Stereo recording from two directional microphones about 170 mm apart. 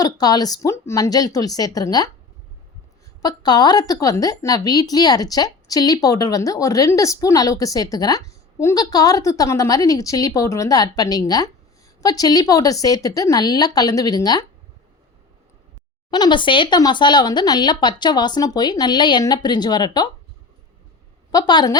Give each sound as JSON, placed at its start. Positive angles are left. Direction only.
{"t": 0.0, "sound": "a woman's voice", "side_deg": 20}
{"t": 3.2, "sound": "a woman's voice", "side_deg": 25}
{"t": 16.0, "sound": "a woman's voice", "side_deg": 25}
{"t": 21.3, "sound": "a woman's voice", "side_deg": 25}